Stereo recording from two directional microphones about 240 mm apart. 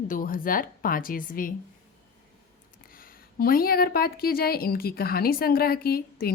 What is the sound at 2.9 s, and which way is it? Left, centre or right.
A woman's voice, left.